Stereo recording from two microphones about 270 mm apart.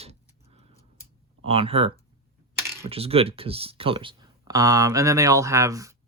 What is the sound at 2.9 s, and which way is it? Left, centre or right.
Speech, right.